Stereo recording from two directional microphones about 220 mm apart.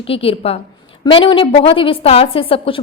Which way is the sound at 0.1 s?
25° left (ahead or behind).